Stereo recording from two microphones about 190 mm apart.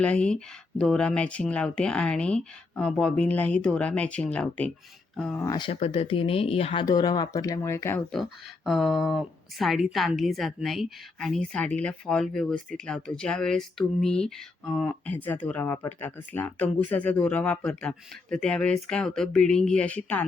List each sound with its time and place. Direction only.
0.0 s speech: 5° left (ahead or behind)
5.4 s speech: 20° left (ahead or behind)
6.8 s speech: 20° left (ahead or behind)
8.1 s speech: centre (ahead or behind)